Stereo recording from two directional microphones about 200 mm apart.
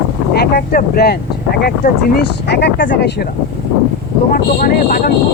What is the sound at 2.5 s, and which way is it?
Speech, 55° left (ahead or behind).